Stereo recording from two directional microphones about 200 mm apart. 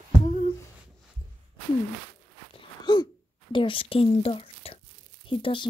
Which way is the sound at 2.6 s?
20° left (ahead or behind).